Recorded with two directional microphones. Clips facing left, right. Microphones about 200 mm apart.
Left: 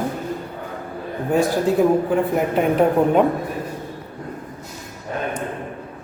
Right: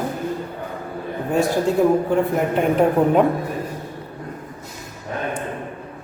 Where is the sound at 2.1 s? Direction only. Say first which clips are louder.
Even; centre (ahead or behind).